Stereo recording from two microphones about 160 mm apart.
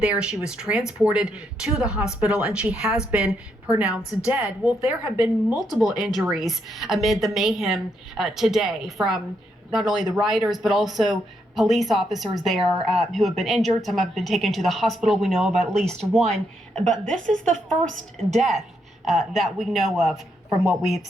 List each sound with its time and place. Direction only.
0.0 s a woman's voice: 5° right (ahead or behind)